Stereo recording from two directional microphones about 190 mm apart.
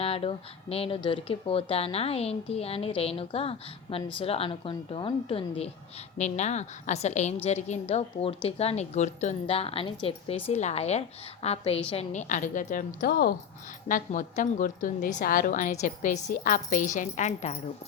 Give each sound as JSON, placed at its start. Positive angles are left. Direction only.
{"t": 0.0, "sound": "speech", "side_deg": 30}
{"t": 13.8, "sound": "speech", "side_deg": 45}